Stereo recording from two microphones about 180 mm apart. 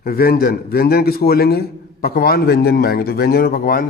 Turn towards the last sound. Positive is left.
turn(degrees=55)  # may be behind; listen again after turning